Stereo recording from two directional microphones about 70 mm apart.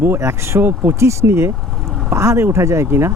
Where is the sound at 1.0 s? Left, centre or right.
Right.